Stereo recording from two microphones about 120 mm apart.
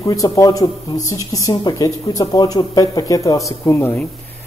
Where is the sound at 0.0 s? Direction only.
30° left (ahead or behind).